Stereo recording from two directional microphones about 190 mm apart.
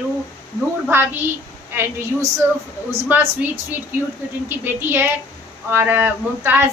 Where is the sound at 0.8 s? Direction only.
10° right (ahead or behind).